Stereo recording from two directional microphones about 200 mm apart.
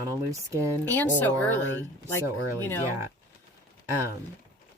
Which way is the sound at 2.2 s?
15° right (ahead or behind).